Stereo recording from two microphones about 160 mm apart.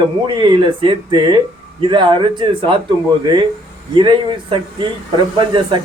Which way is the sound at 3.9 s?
30° right (ahead or behind).